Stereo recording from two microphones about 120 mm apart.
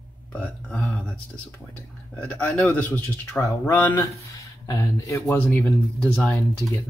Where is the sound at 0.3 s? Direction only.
10° left (ahead or behind).